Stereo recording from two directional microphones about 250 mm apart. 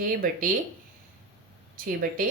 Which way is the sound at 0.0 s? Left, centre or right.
Right.